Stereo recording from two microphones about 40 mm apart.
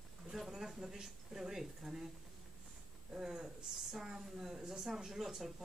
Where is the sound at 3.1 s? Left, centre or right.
Centre.